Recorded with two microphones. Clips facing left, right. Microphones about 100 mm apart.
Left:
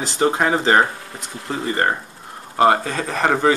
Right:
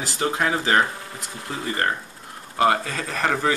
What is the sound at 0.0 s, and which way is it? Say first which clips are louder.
Speech: left 5 dB; 30° left (ahead or behind).